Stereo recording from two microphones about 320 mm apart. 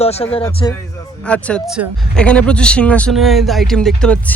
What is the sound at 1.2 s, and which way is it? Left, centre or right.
Speech, centre.